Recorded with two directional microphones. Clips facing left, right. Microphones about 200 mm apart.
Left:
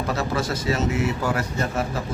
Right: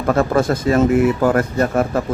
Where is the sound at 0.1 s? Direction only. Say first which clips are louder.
Right 12 dB; 50° right (ahead or behind).